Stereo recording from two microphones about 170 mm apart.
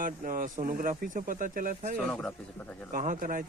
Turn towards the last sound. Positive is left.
turn(degrees=-50)  # may be behind; listen again after turning